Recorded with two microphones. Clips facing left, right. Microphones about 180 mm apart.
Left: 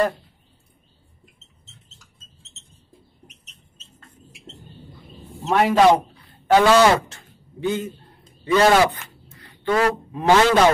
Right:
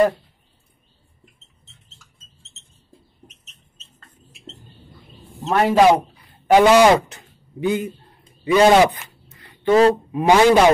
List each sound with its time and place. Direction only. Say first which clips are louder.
5.5 s a man's voice: right 1 dB; centre (ahead or behind)
6.1 s livestock: right 3 dB; 15° right (ahead or behind)
9.7 s speech: right 6 dB; 25° right (ahead or behind)
10.1 s a man's voice: right 1 dB; 15° right (ahead or behind)